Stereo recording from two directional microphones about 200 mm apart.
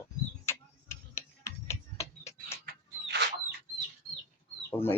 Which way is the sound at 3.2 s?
60° right (ahead or behind).